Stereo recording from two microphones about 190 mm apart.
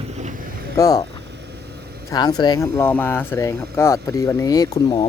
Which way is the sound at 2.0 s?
20° left (ahead or behind).